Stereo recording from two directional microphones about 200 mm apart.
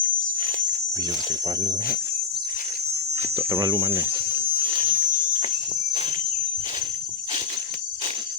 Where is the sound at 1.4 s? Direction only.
20° right (ahead or behind).